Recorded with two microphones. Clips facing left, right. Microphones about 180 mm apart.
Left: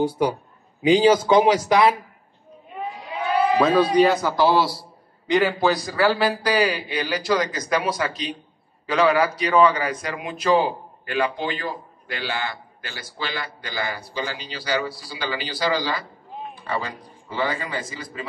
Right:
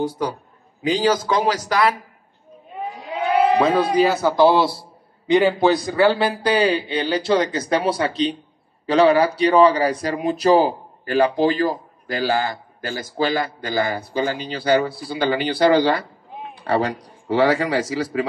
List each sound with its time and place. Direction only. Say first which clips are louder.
0.8 s speech: left 3 dB; 15° left (ahead or behind)
3.9 s a man's voice: even; centre (ahead or behind)
4.4 s a man's voice: right 7 dB; 20° right (ahead or behind); by 18.2 s 85° right